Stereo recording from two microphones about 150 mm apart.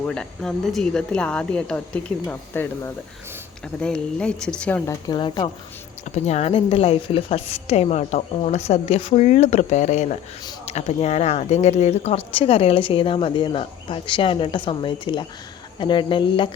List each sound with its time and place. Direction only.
0.1 s speech: 5° left (ahead or behind)
5.0 s speech: 30° left (ahead or behind)
6.1 s a woman's voice: 50° left (ahead or behind)